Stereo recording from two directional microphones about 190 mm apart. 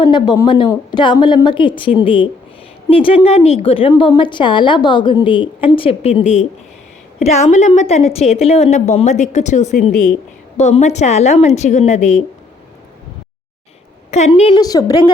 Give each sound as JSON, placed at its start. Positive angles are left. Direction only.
{"t": 0.0, "sound": "a woman's voice", "side_deg": 25}
{"t": 14.1, "sound": "a woman's voice", "side_deg": 35}